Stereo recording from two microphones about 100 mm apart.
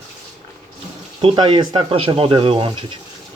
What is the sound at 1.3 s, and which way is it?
Speech, 45° right (ahead or behind).